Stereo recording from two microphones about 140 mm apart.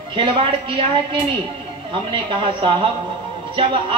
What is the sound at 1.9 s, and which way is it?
A woman's voice, 35° right (ahead or behind).